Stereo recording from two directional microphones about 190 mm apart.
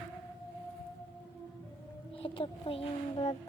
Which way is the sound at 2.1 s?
25° left (ahead or behind).